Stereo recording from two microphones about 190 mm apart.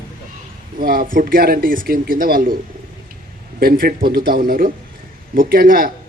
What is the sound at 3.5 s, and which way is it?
A man's voice, 50° right (ahead or behind).